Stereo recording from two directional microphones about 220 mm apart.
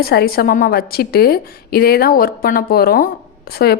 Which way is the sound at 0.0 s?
45° left (ahead or behind).